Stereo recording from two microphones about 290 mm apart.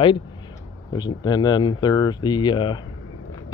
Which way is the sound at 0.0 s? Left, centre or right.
Centre.